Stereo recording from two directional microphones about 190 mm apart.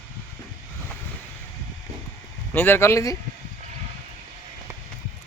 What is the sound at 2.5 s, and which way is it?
Speech, 10° left (ahead or behind).